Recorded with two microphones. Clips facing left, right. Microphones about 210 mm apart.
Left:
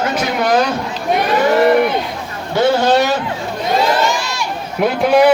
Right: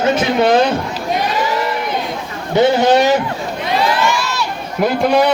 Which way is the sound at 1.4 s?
60° left (ahead or behind).